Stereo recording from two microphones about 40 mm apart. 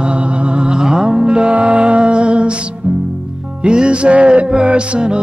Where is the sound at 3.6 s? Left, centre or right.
Right.